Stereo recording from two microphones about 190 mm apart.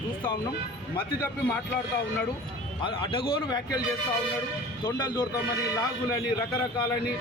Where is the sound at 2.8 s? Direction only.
25° left (ahead or behind).